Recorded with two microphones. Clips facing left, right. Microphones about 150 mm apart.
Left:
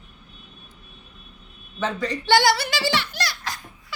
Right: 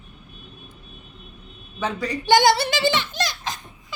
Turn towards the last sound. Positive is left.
turn(degrees=-20)  # may be behind; listen again after turning